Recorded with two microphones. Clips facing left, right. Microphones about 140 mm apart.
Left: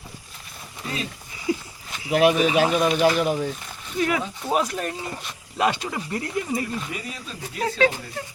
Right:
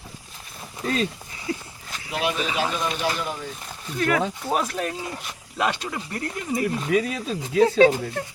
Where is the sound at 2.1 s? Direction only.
55° left (ahead or behind).